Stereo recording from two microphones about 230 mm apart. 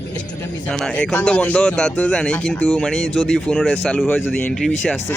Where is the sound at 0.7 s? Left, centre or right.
Centre.